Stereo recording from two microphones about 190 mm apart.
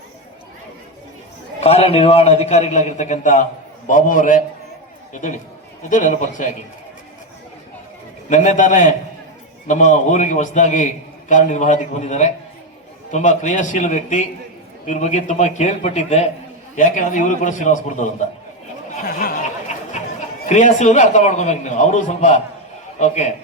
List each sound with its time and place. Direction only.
1.6 s a man's voice: 30° left (ahead or behind)
5.9 s a man's voice: 40° left (ahead or behind)
8.3 s a man's voice: 40° left (ahead or behind)
19.0 s a sound: 50° left (ahead or behind)
20.5 s a man's voice: 40° left (ahead or behind)